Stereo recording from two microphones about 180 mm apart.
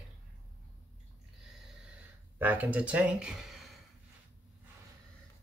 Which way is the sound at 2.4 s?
10° right (ahead or behind).